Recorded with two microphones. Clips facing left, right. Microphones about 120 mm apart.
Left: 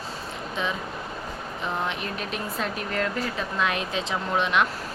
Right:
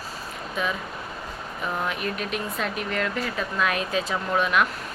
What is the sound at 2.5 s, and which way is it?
A woman's voice, 30° left (ahead or behind).